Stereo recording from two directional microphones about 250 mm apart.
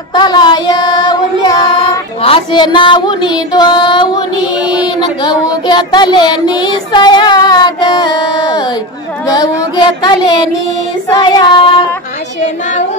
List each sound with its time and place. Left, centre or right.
0.1 s a sound: centre
2.2 s female singing: centre
5.2 s child singing: centre
9.3 s female singing: centre